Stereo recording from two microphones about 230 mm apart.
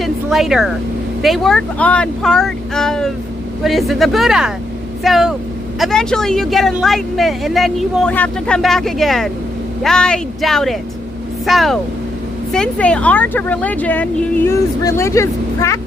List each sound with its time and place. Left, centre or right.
0.0 s vehicle: centre
1.2 s a woman's voice: centre